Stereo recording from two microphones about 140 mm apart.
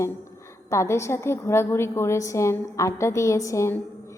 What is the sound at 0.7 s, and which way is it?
A woman's voice, 20° left (ahead or behind).